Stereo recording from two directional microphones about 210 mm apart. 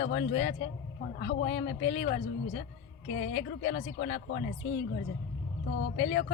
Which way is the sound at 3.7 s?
55° left (ahead or behind).